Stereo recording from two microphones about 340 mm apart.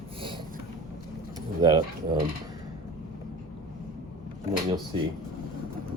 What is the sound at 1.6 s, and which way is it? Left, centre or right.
Speech, centre.